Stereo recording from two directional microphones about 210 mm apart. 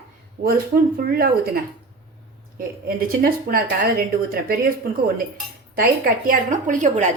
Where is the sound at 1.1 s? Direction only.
45° right (ahead or behind).